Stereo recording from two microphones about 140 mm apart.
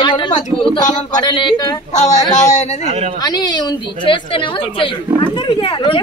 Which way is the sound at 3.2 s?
30° left (ahead or behind).